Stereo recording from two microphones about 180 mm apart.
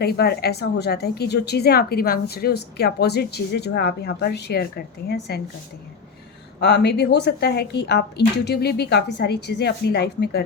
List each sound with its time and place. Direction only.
0.0 s a woman's voice: 60° left (ahead or behind)
6.6 s a woman's voice: 65° left (ahead or behind)